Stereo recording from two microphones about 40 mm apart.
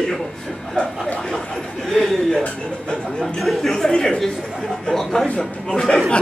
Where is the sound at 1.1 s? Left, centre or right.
Centre.